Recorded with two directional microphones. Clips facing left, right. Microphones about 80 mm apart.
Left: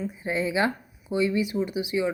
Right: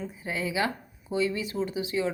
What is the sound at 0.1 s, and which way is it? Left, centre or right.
Speech, left.